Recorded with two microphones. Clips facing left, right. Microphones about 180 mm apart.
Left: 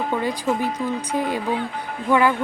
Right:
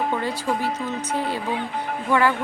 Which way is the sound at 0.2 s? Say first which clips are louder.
Left 2 dB; 15° left (ahead or behind).